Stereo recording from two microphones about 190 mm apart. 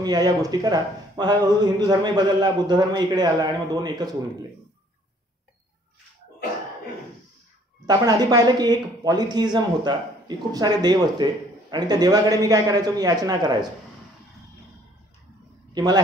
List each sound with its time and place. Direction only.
0.0 s speech: 20° right (ahead or behind)
7.8 s speech: 20° right (ahead or behind)
15.7 s a man's voice: 20° right (ahead or behind)